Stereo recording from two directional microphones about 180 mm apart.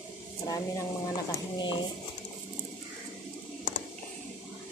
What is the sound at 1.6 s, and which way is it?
Speech, 25° left (ahead or behind).